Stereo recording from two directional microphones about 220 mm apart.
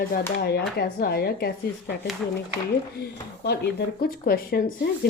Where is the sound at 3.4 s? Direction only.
50° left (ahead or behind).